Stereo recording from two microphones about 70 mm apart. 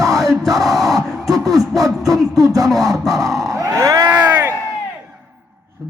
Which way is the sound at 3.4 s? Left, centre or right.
Right.